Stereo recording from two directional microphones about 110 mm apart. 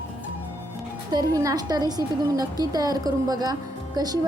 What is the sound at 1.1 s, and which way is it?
A woman's voice, 35° right (ahead or behind).